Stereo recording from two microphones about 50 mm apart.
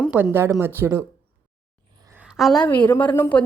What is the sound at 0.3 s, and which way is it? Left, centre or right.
Speech, right.